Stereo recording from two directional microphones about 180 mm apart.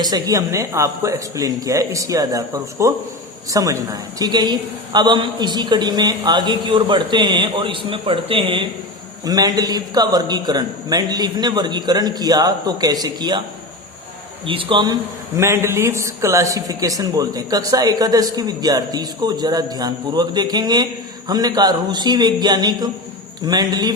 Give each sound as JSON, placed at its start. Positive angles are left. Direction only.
{"t": 0.0, "sound": "a man's voice", "side_deg": -20}
{"t": 14.4, "sound": "a man's voice", "side_deg": -30}
{"t": 15.4, "sound": "a man's voice", "side_deg": -15}